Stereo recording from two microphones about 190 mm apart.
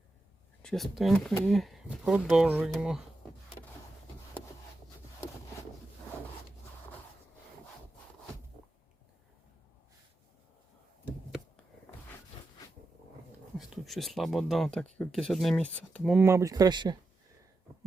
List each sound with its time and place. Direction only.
0.6 s speech: centre (ahead or behind)
13.6 s speech: centre (ahead or behind)
16.1 s speech: 15° right (ahead or behind)